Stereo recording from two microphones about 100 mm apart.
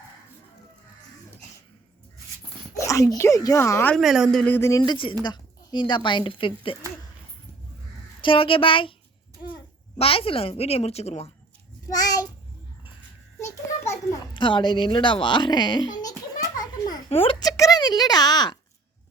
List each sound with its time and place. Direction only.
2.7 s speech: 30° left (ahead or behind)
3.9 s a woman's voice: centre (ahead or behind)
4.4 s speech: 25° left (ahead or behind)
4.8 s speech: 55° left (ahead or behind)
8.2 s speech: 60° left (ahead or behind)
10.0 s a woman's voice: 75° left (ahead or behind); by 11.3 s 90° left
11.9 s child singing: 40° left (ahead or behind)
14.3 s a sound: 55° left (ahead or behind)
17.1 s a child's voice: 75° left (ahead or behind)
17.4 s a sound: 40° left (ahead or behind)